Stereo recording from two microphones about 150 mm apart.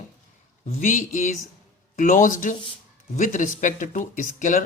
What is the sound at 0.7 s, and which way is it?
Speech, 60° left (ahead or behind).